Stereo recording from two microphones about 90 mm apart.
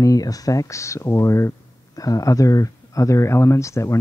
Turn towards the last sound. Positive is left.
turn(degrees=35)  # may be behind; listen again after turning